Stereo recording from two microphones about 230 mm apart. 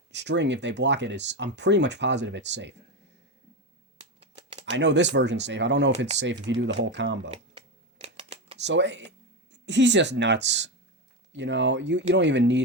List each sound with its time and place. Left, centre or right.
0.1 s speech: right
4.2 s a sound: right
4.6 s speech: right
8.0 s typing: right
8.6 s speech: right